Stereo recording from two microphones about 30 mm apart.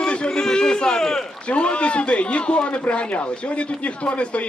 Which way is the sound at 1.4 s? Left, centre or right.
Left.